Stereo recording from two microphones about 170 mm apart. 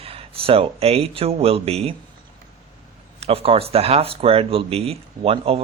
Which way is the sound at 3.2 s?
35° right (ahead or behind).